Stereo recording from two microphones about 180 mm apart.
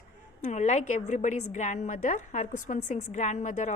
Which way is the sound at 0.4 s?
40° left (ahead or behind).